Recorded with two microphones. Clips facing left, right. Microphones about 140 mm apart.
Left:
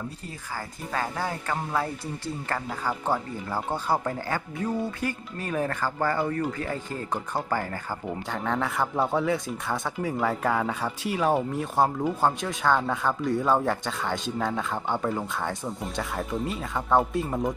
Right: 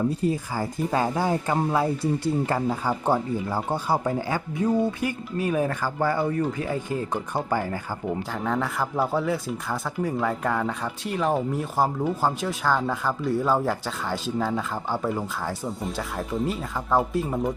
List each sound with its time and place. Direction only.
0.3 s speech: 15° right (ahead or behind)
8.3 s speech: centre (ahead or behind)